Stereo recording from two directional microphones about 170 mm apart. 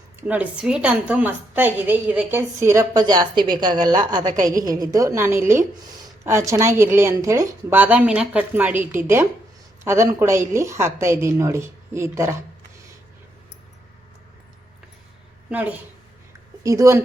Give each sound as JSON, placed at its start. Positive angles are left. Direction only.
{"t": 0.2, "sound": "a woman's voice", "side_deg": -10}
{"t": 15.4, "sound": "a woman's voice", "side_deg": -10}